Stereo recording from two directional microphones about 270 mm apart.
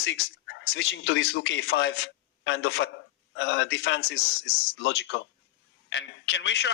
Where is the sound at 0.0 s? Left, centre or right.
Left.